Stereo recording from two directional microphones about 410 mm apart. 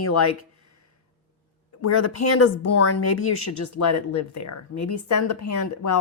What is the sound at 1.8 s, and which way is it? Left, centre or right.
Speech, left.